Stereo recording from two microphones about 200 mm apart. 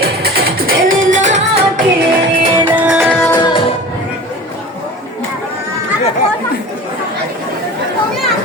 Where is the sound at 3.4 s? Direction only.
25° left (ahead or behind).